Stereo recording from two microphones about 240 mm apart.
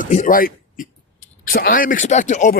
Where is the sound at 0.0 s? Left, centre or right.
Left.